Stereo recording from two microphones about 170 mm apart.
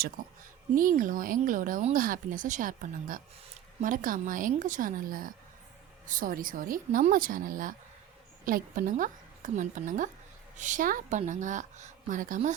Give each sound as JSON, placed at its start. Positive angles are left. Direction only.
{"t": 0.8, "sound": "speech", "side_deg": -50}